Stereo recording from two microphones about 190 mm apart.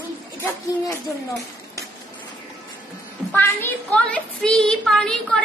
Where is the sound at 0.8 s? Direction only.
15° left (ahead or behind).